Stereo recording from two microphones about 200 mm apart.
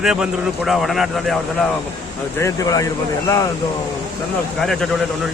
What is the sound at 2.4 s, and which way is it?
Speech, 15° left (ahead or behind).